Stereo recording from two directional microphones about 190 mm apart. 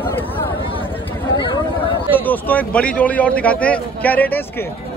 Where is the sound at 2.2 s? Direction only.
10° left (ahead or behind).